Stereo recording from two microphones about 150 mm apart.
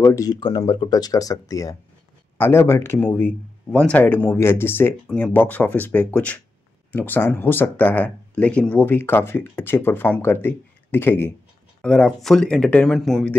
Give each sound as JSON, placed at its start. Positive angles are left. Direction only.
{"t": 0.0, "sound": "speech", "side_deg": 20}